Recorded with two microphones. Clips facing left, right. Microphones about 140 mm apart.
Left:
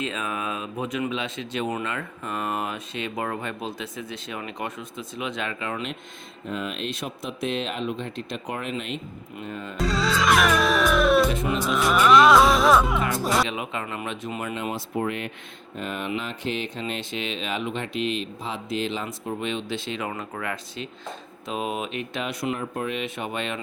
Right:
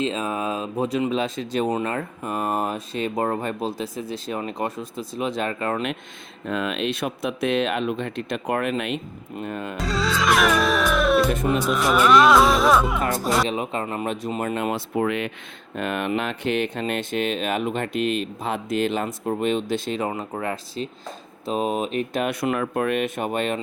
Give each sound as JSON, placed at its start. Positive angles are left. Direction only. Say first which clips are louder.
{"t": 0.0, "sound": "speech", "louder": "right 5 dB", "side_deg": -30}
{"t": 6.5, "sound": "speech", "louder": "right 5 dB", "side_deg": -80}
{"t": 9.7, "sound": "music", "louder": "left 1 dB", "side_deg": 0}
{"t": 13.5, "sound": "speech", "louder": "right 5 dB", "side_deg": -35}
{"t": 14.5, "sound": "speech", "louder": "right 5 dB", "side_deg": -55}
{"t": 14.9, "sound": "speech", "louder": "right 4 dB", "side_deg": -90}
{"t": 15.7, "sound": "speech", "louder": "right 5 dB", "side_deg": -65}
{"t": 20.1, "sound": "speech", "louder": "right 4 dB", "side_deg": -30}
{"t": 22.3, "sound": "speech", "louder": "right 5 dB", "side_deg": -60}